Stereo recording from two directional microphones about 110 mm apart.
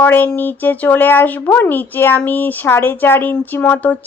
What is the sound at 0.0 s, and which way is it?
Speech, 20° left (ahead or behind).